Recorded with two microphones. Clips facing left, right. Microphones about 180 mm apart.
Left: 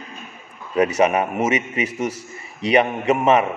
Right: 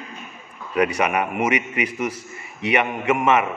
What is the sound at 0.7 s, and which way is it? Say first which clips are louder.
A man's voice: left 3 dB; 30° left (ahead or behind).